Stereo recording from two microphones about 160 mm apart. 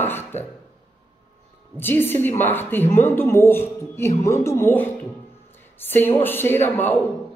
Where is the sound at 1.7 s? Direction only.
15° left (ahead or behind).